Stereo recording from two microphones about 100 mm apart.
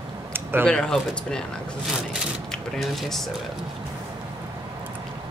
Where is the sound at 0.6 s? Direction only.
10° left (ahead or behind).